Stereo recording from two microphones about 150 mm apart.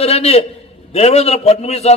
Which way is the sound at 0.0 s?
45° left (ahead or behind).